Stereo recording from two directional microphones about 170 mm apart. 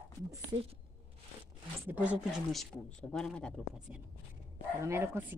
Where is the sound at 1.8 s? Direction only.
10° right (ahead or behind).